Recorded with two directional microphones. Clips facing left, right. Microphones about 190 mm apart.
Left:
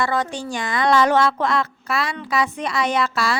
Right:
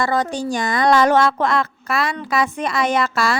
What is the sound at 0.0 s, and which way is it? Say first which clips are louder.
Speech: right 3 dB; 40° right (ahead or behind).